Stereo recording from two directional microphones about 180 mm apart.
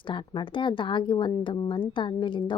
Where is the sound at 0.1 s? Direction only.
25° left (ahead or behind).